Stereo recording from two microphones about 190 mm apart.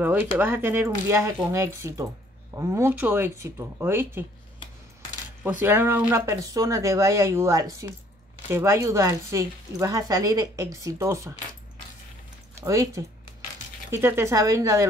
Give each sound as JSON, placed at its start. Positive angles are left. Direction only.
{"t": 0.0, "sound": "speech", "side_deg": -10}
{"t": 5.4, "sound": "speech", "side_deg": -10}
{"t": 12.5, "sound": "speech", "side_deg": -15}